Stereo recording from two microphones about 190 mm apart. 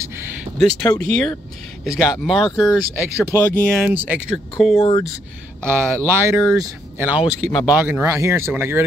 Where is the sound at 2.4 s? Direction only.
20° left (ahead or behind).